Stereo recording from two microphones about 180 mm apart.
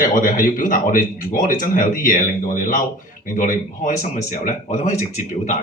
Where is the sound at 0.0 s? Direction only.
50° left (ahead or behind).